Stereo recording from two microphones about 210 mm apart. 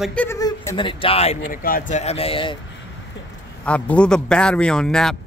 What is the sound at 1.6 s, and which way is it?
Speech, 40° left (ahead or behind).